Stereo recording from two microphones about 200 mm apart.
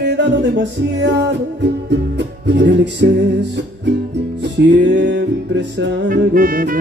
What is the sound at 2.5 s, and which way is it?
Music, 60° right (ahead or behind).